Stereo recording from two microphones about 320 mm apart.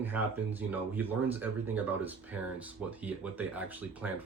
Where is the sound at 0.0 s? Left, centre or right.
Centre.